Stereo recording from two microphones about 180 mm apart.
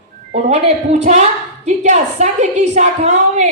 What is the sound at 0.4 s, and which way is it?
A woman's voice, 35° right (ahead or behind).